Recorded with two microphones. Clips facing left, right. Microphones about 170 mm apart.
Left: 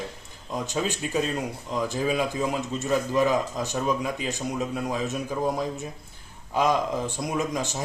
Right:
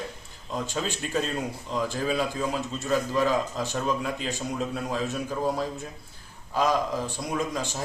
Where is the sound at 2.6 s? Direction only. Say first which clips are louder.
Left 1 dB; 20° left (ahead or behind).